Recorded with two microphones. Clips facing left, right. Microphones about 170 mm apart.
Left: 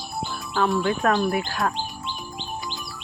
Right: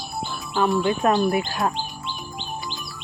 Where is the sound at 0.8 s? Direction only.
15° right (ahead or behind).